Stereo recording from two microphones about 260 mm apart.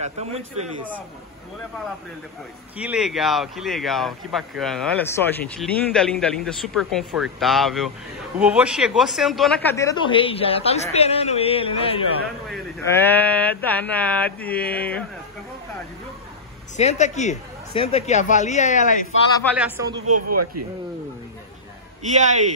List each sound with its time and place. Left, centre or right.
0.0 s a man's voice: right
2.8 s speech: centre; by 12.0 s left
12.4 s speech: centre
16.7 s speech: left
19.5 s speech: centre
20.2 s a man's voice: right
22.0 s a man's voice: right